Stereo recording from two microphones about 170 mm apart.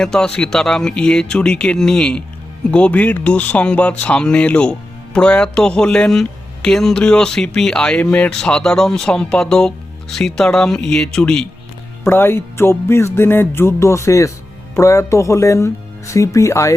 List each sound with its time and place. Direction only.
0.0 s speech: 5° left (ahead or behind)
12.0 s music: 15° left (ahead or behind)